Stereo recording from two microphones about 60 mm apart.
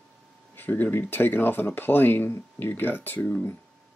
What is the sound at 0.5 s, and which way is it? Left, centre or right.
Speech, left.